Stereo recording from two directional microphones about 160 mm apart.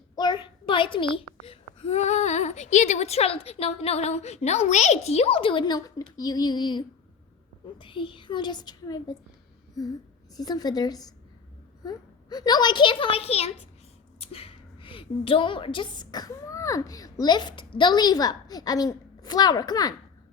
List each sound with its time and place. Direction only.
0.2 s a child's voice: 30° left (ahead or behind)
10.3 s a woman's voice: 25° left (ahead or behind)